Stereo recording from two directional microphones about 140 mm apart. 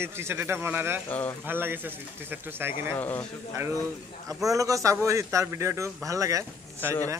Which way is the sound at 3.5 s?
20° right (ahead or behind).